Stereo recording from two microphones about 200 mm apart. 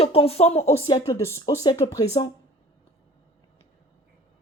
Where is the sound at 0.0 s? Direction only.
30° left (ahead or behind).